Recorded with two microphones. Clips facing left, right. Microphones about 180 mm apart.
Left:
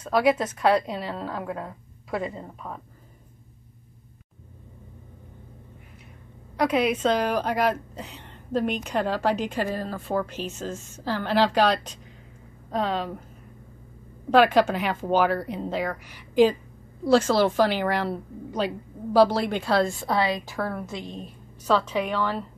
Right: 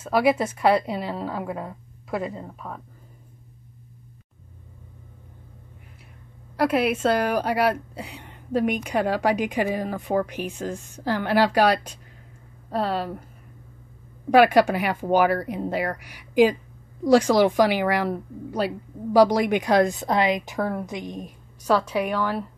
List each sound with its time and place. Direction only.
0.0 s a woman's voice: 10° right (ahead or behind)
6.5 s a woman's voice: 5° right (ahead or behind)
14.3 s a woman's voice: 10° right (ahead or behind)